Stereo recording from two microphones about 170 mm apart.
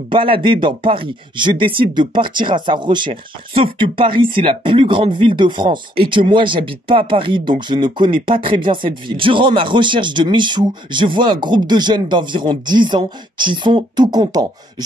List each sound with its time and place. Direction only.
0.1 s speech: 30° right (ahead or behind)